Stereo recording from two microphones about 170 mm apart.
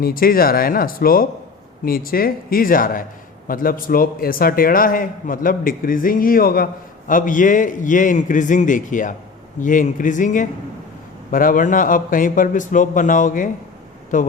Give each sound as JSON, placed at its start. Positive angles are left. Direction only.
{"t": 0.0, "sound": "a man's voice", "side_deg": 60}